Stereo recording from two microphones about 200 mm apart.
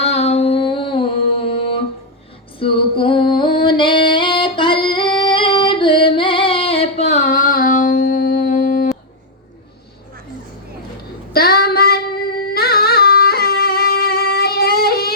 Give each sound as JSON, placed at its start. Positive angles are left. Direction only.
{"t": 0.0, "sound": "music", "side_deg": 35}
{"t": 2.6, "sound": "singing", "side_deg": 25}
{"t": 11.3, "sound": "female singing", "side_deg": 50}